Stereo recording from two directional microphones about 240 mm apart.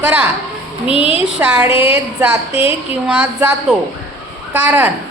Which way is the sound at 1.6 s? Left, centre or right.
Left.